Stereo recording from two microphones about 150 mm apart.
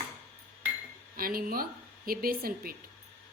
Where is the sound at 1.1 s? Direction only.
70° right (ahead or behind).